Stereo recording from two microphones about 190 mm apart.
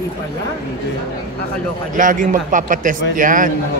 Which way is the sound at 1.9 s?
45° right (ahead or behind).